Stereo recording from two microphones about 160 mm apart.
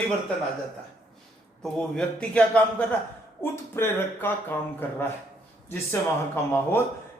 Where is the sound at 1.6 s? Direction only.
5° left (ahead or behind).